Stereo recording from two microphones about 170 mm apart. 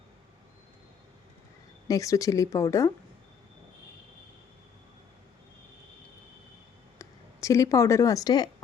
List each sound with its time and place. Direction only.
1.9 s speech: 20° left (ahead or behind)
7.0 s speech: 20° left (ahead or behind)